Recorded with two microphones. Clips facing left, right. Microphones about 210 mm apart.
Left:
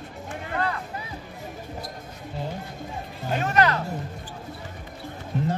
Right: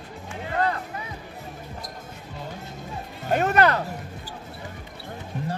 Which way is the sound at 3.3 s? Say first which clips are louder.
Right 3 dB; 55° right (ahead or behind).